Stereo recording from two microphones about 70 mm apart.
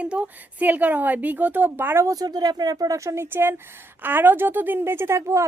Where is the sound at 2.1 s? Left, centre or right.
Right.